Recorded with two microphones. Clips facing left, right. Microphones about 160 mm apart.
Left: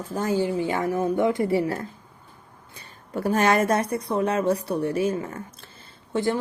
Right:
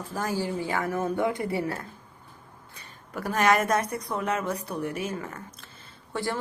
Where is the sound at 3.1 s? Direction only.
30° left (ahead or behind).